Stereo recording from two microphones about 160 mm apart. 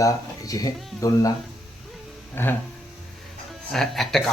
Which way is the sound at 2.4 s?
15° left (ahead or behind).